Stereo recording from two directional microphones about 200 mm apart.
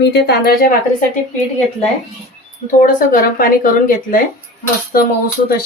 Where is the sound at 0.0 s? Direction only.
55° left (ahead or behind).